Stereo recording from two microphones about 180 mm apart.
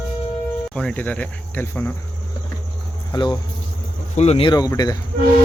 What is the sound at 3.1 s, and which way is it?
Speech, 25° left (ahead or behind).